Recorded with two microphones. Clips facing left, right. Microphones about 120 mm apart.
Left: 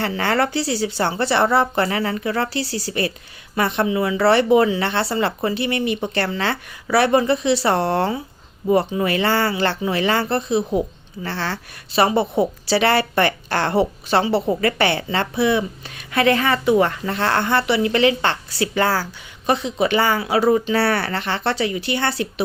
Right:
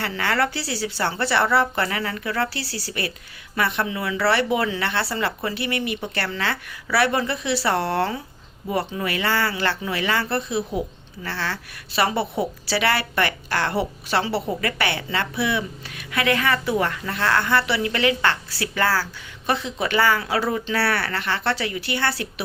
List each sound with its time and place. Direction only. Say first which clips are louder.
0.2 s a woman's voice: left 2 dB; 30° left (ahead or behind)